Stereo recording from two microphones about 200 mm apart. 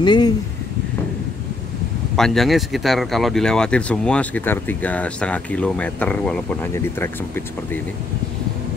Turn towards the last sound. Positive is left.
turn(degrees=10)  # may be behind; listen again after turning